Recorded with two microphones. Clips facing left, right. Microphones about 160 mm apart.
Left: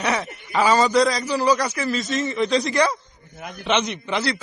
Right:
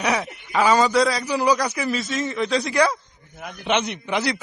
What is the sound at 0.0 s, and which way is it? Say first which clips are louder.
A man's voice: right 1 dB; centre (ahead or behind).